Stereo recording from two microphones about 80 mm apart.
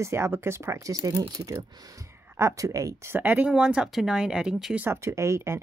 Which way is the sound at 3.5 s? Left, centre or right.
Centre.